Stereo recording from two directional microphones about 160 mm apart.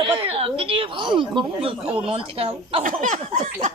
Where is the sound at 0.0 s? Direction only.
35° right (ahead or behind).